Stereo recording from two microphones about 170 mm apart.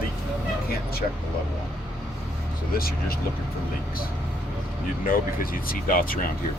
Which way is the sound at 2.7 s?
60° left (ahead or behind).